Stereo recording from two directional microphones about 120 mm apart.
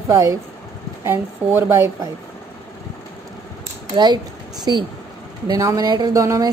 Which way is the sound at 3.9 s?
35° right (ahead or behind).